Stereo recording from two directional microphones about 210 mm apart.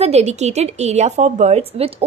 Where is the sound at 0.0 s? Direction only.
30° right (ahead or behind).